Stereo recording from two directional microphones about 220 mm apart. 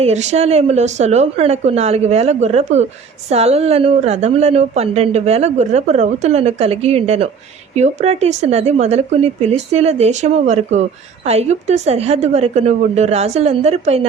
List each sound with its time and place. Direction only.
0.0 s a woman's voice: 30° right (ahead or behind)